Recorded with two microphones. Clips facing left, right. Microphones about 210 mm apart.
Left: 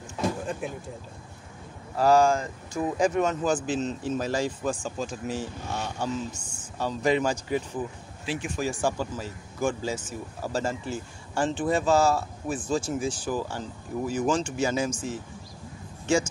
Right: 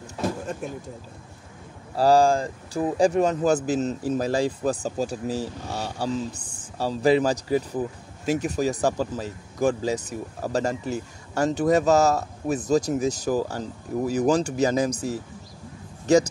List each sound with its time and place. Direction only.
0.6 s speech: 40° right (ahead or behind)
2.0 s speech: 35° right (ahead or behind)